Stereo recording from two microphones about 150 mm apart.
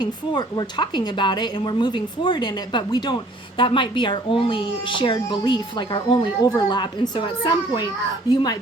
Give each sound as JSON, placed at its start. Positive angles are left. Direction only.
{"t": 0.0, "sound": "a woman's voice", "side_deg": 30}
{"t": 8.3, "sound": "a woman's voice", "side_deg": 30}